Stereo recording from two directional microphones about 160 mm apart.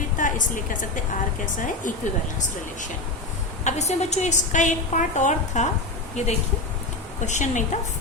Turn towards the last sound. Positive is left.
turn(degrees=50)  # may be behind; listen again after turning